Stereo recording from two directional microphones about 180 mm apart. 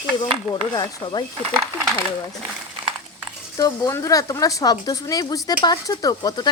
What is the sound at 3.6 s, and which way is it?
Speech, 20° left (ahead or behind).